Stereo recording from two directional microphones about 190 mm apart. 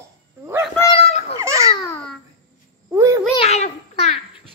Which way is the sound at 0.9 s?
35° left (ahead or behind).